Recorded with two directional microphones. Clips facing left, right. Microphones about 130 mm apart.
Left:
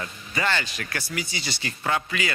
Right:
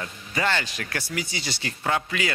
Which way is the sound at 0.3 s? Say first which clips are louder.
Right 1 dB; 35° right (ahead or behind).